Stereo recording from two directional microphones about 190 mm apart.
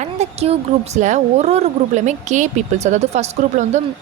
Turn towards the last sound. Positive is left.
turn(degrees=-35)  # may be behind; listen again after turning